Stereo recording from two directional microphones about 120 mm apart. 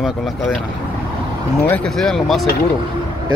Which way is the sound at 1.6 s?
10° left (ahead or behind).